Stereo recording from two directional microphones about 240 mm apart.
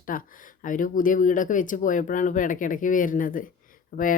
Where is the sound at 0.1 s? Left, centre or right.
Left.